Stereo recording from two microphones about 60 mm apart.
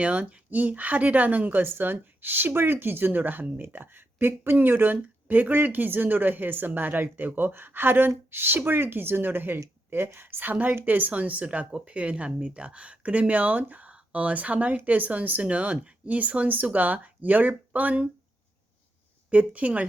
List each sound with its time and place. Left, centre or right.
0.0 s speech: right
10.5 s speech: right
19.3 s speech: right